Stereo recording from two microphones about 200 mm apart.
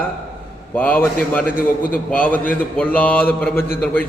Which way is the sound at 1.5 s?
45° left (ahead or behind).